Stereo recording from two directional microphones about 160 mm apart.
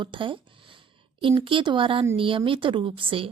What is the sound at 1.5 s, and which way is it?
A woman's voice, 30° right (ahead or behind).